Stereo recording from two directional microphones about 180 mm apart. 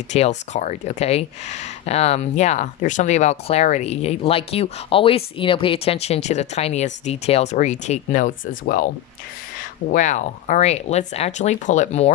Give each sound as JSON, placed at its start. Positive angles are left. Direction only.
{"t": 0.1, "sound": "speech", "side_deg": 40}